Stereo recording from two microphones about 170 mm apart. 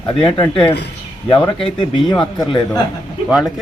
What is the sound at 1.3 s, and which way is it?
Speech, 30° left (ahead or behind).